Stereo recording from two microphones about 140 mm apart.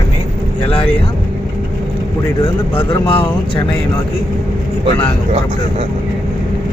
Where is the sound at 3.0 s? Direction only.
40° left (ahead or behind).